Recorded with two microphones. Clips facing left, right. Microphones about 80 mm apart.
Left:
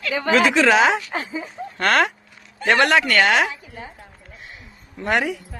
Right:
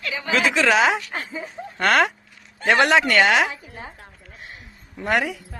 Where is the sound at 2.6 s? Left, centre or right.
Centre.